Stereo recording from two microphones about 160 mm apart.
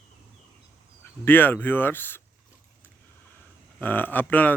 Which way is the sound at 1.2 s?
10° left (ahead or behind).